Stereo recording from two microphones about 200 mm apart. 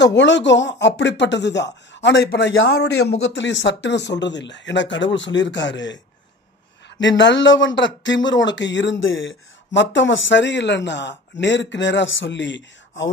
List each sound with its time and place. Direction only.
0.0 s speech: 60° left (ahead or behind)
2.5 s speech: 65° left (ahead or behind)
7.0 s speech: 65° left (ahead or behind)